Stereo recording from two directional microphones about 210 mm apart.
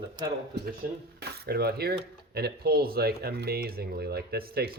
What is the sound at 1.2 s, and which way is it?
Speech, 50° right (ahead or behind).